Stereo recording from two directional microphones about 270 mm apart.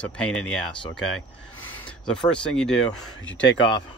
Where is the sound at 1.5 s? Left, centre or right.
Centre.